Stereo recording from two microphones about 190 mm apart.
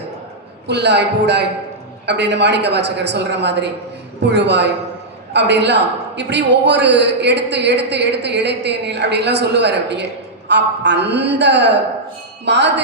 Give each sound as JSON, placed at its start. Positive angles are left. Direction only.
{"t": 0.7, "sound": "a man's voice", "side_deg": -60}